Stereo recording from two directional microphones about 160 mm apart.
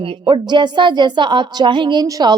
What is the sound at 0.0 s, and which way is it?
A woman's voice, 30° right (ahead or behind).